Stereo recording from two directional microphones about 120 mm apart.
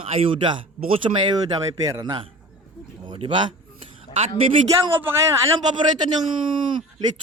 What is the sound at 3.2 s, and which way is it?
Speech, 45° right (ahead or behind).